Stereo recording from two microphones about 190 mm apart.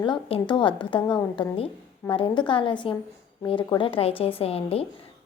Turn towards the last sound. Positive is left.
turn(degrees=30)  # may be behind; listen again after turning